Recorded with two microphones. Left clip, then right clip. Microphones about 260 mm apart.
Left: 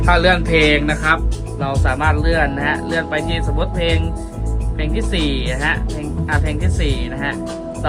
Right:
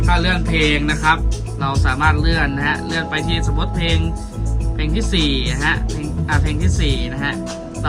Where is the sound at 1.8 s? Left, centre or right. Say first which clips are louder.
Right 1 dB; left.